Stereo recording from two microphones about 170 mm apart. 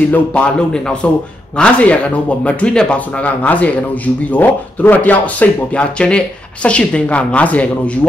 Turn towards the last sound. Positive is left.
turn(degrees=10)  # may be behind; listen again after turning